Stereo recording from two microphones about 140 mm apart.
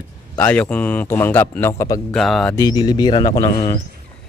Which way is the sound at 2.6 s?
30° left (ahead or behind).